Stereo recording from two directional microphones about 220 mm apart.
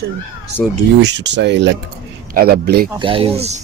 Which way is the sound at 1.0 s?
50° right (ahead or behind).